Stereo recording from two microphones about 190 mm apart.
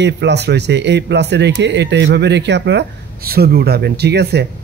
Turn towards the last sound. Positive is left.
turn(degrees=-60)  # may be behind; listen again after turning